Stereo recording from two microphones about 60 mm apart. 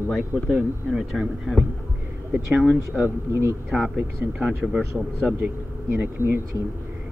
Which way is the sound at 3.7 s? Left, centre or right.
Centre.